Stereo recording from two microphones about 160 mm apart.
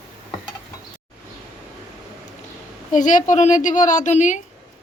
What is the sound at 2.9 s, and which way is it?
A woman's voice, 50° left (ahead or behind).